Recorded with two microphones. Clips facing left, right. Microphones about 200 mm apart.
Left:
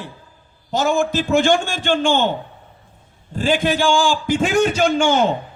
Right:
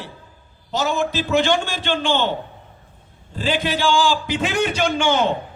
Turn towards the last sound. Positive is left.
turn(degrees=45)  # may be behind; listen again after turning